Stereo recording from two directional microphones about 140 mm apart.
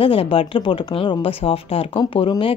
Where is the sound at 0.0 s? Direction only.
40° left (ahead or behind).